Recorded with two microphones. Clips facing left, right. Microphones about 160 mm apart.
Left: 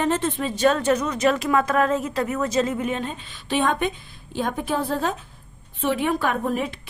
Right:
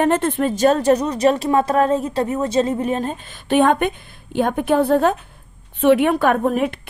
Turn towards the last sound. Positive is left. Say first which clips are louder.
# right 7 dB
turn(degrees=-60)  # may be behind; listen again after turning